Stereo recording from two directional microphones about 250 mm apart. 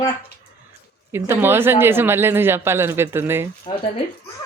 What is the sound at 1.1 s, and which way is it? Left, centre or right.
Speech, centre.